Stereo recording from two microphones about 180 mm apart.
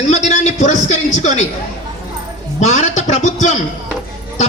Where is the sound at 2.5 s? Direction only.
40° left (ahead or behind).